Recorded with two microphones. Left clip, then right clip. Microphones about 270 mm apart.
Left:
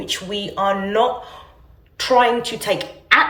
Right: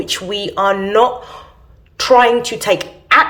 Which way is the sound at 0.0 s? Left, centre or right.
Centre.